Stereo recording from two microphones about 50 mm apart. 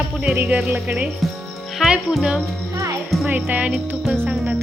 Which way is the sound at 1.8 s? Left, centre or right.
Centre.